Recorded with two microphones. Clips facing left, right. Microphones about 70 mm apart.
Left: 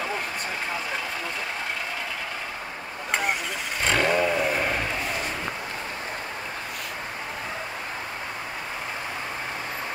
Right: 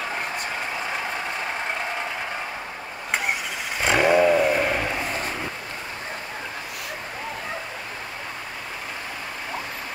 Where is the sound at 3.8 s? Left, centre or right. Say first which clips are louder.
Right 5 dB; centre.